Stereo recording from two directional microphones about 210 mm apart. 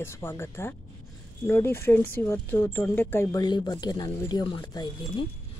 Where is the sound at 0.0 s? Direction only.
10° left (ahead or behind).